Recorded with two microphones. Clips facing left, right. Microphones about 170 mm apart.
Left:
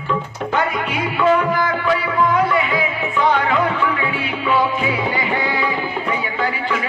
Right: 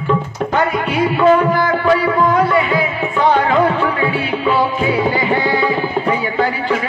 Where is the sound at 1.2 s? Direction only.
40° right (ahead or behind).